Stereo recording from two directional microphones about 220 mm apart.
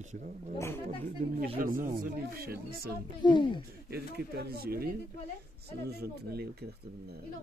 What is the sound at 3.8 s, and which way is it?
Speech, 45° right (ahead or behind).